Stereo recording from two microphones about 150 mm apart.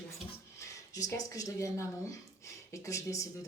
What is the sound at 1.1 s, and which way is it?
Speech, 20° left (ahead or behind).